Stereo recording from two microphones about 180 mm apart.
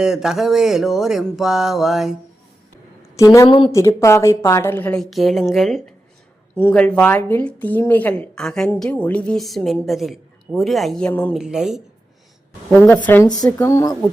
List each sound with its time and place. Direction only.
0.0 s a woman's voice: 5° right (ahead or behind)
3.2 s a woman's voice: 20° left (ahead or behind)